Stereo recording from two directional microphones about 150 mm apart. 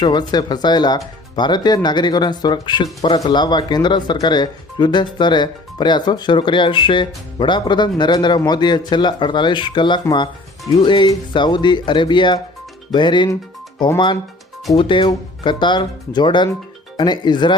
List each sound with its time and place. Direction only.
0.0 s speech: 30° left (ahead or behind)